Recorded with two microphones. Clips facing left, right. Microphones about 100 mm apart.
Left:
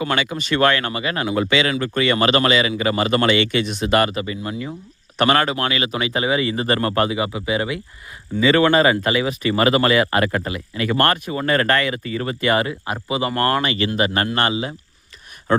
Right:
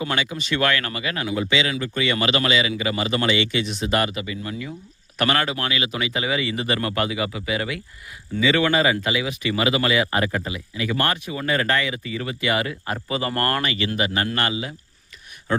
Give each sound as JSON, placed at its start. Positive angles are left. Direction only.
{"t": 0.0, "sound": "speech", "side_deg": 60}
{"t": 1.4, "sound": "speech", "side_deg": 55}
{"t": 4.1, "sound": "speech", "side_deg": 40}
{"t": 8.4, "sound": "speech", "side_deg": 45}
{"t": 12.6, "sound": "speech", "side_deg": 20}
{"t": 13.7, "sound": "speech", "side_deg": 40}
{"t": 14.3, "sound": "speech", "side_deg": 30}
{"t": 15.5, "sound": "speech", "side_deg": 45}